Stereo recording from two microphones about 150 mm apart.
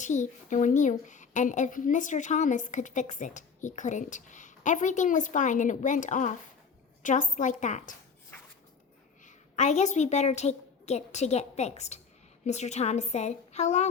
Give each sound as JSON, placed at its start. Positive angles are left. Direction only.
{"t": 0.0, "sound": "speech", "side_deg": 55}
{"t": 9.2, "sound": "a woman's voice", "side_deg": 50}